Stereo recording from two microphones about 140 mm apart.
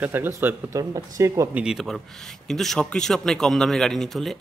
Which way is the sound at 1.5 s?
5° right (ahead or behind).